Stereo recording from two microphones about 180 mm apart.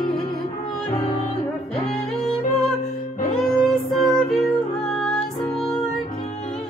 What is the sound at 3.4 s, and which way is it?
Child singing, centre (ahead or behind).